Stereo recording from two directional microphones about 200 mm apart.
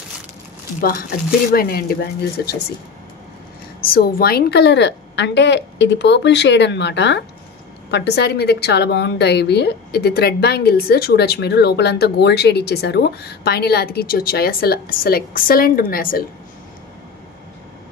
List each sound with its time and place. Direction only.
0.7 s a woman's voice: 45° left (ahead or behind)
3.9 s a woman's voice: 50° left (ahead or behind)